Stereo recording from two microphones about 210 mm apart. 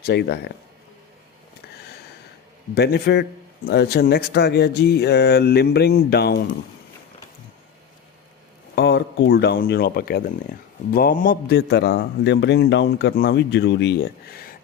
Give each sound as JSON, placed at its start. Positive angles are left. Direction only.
{"t": 0.0, "sound": "a man's voice", "side_deg": 50}
{"t": 2.7, "sound": "a man's voice", "side_deg": 50}
{"t": 8.7, "sound": "a man's voice", "side_deg": 50}